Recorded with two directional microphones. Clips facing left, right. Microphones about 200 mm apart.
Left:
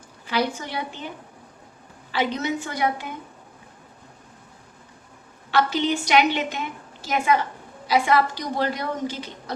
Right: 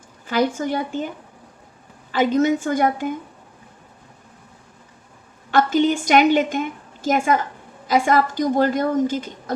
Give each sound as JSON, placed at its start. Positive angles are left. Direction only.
{"t": 0.3, "sound": "a woman's voice", "side_deg": -45}
{"t": 2.1, "sound": "a woman's voice", "side_deg": -45}
{"t": 5.5, "sound": "a woman's voice", "side_deg": -50}